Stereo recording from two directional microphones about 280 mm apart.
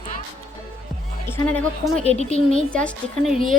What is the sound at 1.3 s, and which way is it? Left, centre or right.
Speech, centre.